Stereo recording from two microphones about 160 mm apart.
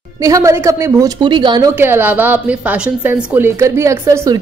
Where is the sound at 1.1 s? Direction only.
30° right (ahead or behind).